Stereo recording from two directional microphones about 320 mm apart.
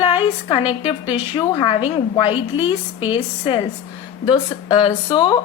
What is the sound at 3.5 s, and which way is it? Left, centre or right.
Speech, centre.